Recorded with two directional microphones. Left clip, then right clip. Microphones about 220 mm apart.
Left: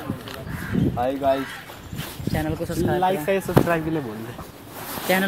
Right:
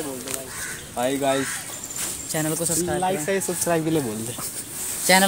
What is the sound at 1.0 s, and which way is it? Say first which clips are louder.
Speech: even; 45° right (ahead or behind).